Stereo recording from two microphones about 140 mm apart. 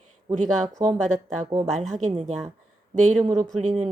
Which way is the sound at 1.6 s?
Centre (ahead or behind).